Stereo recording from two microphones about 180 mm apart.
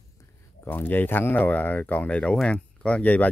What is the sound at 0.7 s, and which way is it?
Speech, 10° left (ahead or behind).